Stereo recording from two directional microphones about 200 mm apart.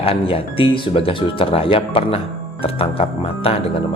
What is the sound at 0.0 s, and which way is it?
Speech, 30° left (ahead or behind).